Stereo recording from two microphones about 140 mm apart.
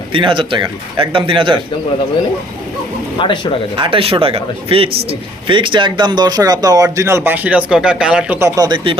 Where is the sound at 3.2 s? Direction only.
35° left (ahead or behind).